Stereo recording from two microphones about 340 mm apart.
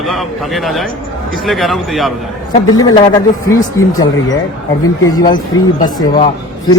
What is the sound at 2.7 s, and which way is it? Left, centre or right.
Speech, centre.